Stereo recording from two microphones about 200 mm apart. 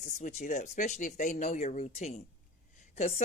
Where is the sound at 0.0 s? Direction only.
40° left (ahead or behind).